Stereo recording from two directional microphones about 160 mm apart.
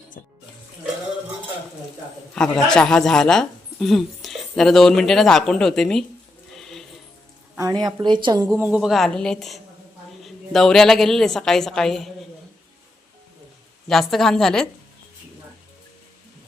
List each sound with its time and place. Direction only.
2.3 s speech: 5° left (ahead or behind)
6.5 s music: centre (ahead or behind)
7.5 s a woman's voice: 20° right (ahead or behind)
8.5 s speech: 10° right (ahead or behind)
13.8 s speech: centre (ahead or behind)